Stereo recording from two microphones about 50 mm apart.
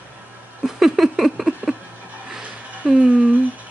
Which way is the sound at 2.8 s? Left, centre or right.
Right.